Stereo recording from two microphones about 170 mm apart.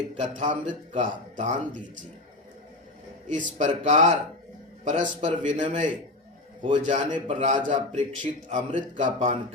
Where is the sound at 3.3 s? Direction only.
45° right (ahead or behind).